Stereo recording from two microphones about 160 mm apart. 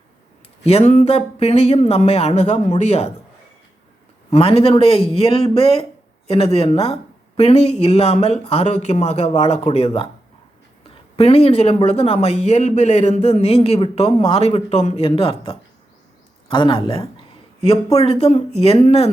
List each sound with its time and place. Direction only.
0.6 s speech: 40° left (ahead or behind)
4.3 s speech: 40° left (ahead or behind)
16.5 s a sound: 30° left (ahead or behind)
17.9 s speech: 40° left (ahead or behind)